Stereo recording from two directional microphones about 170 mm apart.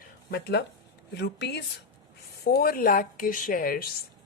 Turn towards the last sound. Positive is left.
turn(degrees=60)  # may be behind; listen again after turning